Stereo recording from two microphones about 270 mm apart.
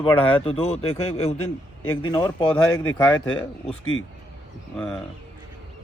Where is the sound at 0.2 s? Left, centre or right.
Centre.